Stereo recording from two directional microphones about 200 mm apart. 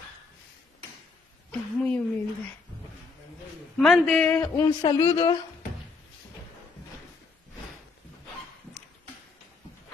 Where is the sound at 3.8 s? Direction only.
5° left (ahead or behind).